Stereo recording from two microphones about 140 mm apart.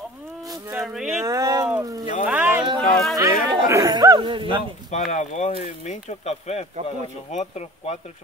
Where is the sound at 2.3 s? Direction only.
10° right (ahead or behind).